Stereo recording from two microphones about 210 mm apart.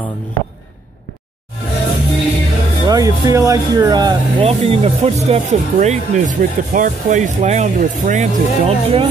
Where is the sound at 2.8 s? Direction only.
15° right (ahead or behind).